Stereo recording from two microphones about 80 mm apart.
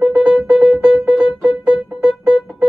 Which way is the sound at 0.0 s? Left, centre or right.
Centre.